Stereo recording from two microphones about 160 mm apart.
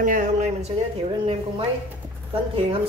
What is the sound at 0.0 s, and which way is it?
Speech, 55° right (ahead or behind).